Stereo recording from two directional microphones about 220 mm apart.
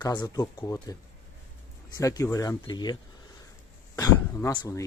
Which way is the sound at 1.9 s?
15° left (ahead or behind).